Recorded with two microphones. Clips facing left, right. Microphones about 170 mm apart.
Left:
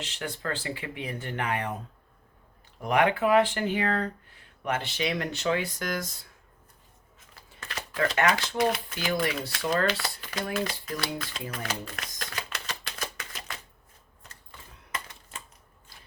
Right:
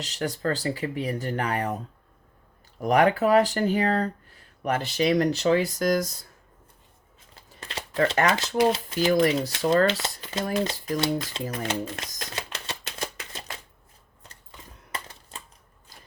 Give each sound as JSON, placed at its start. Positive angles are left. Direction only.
{"t": 0.0, "sound": "speech", "side_deg": -40}
{"t": 2.8, "sound": "speech", "side_deg": -40}
{"t": 7.3, "sound": "crumpling", "side_deg": -25}
{"t": 8.3, "sound": "speech", "side_deg": -25}
{"t": 9.6, "sound": "speech", "side_deg": -25}
{"t": 11.5, "sound": "typewriter", "side_deg": -25}
{"t": 14.9, "sound": "typewriter", "side_deg": -35}